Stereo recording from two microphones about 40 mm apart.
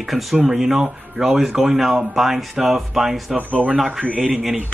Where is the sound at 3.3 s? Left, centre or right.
Right.